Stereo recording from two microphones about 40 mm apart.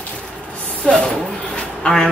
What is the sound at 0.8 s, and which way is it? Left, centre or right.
Speech, centre.